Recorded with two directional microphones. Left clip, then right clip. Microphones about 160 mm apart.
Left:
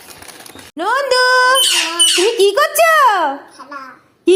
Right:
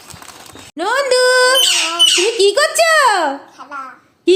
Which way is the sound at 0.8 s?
10° left (ahead or behind).